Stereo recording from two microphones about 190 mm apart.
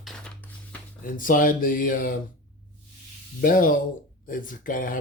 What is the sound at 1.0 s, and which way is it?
Speech, 45° left (ahead or behind).